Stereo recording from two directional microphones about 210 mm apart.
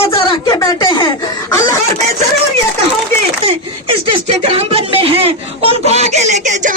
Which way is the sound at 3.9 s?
30° right (ahead or behind).